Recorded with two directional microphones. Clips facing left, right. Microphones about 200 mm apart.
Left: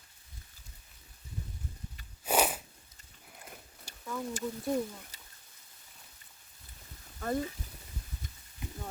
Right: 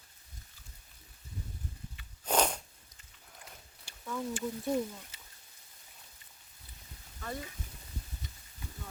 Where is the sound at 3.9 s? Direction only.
40° left (ahead or behind).